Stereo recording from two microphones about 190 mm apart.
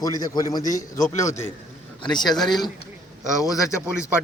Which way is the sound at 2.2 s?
Centre (ahead or behind).